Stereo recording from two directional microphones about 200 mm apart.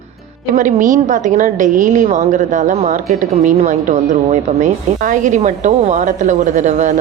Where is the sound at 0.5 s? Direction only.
40° right (ahead or behind).